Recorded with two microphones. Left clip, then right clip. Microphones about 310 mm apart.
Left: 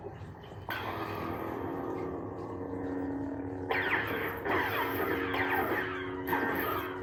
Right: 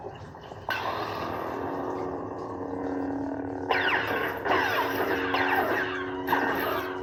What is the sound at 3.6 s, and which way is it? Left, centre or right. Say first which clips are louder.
Music: right 5 dB; right.